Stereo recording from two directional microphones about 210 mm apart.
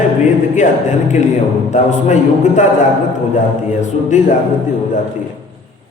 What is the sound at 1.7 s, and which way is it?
Speech, 35° left (ahead or behind).